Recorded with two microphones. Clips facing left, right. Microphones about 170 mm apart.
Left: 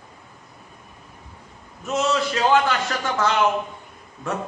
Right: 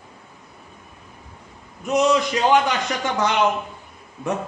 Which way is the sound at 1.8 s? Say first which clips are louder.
Right 4 dB; 15° right (ahead or behind).